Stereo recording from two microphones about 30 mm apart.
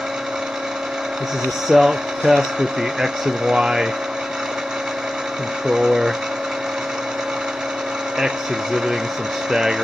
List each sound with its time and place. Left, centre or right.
1.7 s speech: centre
3.5 s speech: right
5.7 s speech: centre
9.5 s speech: centre